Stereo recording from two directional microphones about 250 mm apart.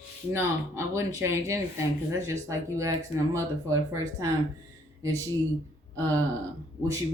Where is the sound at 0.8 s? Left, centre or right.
Centre.